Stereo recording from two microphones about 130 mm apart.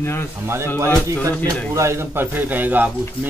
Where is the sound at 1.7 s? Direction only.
20° right (ahead or behind).